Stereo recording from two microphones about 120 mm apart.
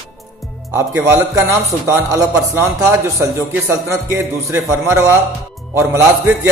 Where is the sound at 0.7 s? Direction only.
20° right (ahead or behind).